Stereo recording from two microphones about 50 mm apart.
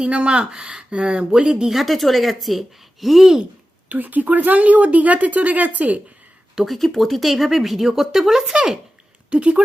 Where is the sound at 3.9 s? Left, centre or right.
Right.